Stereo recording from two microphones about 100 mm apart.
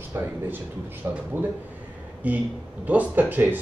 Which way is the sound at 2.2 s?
15° right (ahead or behind).